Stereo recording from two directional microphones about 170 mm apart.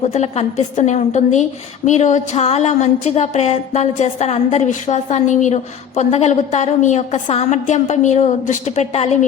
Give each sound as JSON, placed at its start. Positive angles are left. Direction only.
{"t": 0.0, "sound": "a woman's voice", "side_deg": 40}